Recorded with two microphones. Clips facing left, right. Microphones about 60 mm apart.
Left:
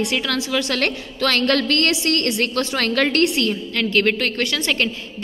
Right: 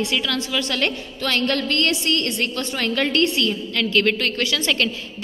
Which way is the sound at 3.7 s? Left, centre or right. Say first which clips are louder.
Left 1 dB; left.